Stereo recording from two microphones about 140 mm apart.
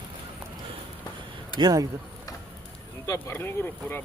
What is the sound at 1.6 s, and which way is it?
Speech, 25° right (ahead or behind).